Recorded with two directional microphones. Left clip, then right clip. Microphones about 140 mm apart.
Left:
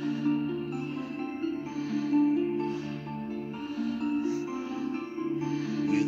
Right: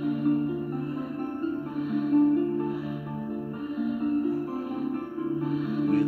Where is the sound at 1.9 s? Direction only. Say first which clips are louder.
Right 3 dB; 35° right (ahead or behind).